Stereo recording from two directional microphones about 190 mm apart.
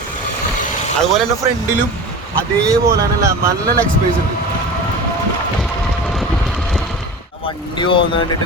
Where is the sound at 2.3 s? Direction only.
15° right (ahead or behind).